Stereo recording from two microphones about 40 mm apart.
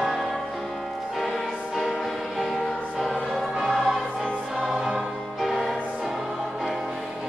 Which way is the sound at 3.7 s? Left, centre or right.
Centre.